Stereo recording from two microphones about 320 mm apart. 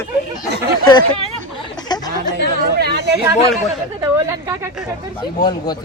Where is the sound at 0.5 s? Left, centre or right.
Right.